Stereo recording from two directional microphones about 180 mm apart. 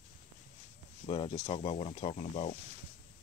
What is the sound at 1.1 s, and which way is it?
Speech, 30° left (ahead or behind).